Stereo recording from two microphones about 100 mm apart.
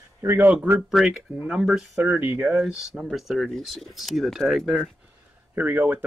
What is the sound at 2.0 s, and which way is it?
Speech, 20° right (ahead or behind).